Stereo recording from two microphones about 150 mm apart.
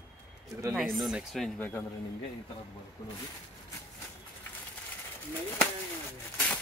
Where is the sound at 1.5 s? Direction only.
15° left (ahead or behind).